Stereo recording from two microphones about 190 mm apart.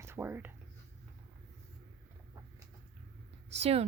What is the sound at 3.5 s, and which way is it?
Speech, 35° right (ahead or behind).